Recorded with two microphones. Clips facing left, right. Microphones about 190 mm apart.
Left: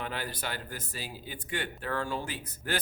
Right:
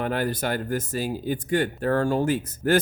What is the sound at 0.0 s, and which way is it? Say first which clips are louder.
Speech: right 11 dB; 50° right (ahead or behind).